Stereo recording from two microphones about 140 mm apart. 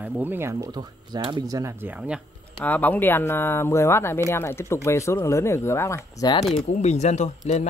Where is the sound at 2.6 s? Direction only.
10° left (ahead or behind).